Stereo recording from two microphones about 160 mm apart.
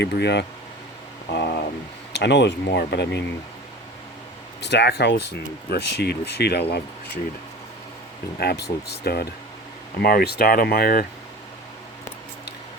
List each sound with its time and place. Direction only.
0.0 s speech: 90° left
1.3 s a sound: 90° left
2.1 s speech: 90° left
4.6 s speech: 90° left
8.4 s speech: 90° left
10.0 s speech: 75° left (ahead or behind)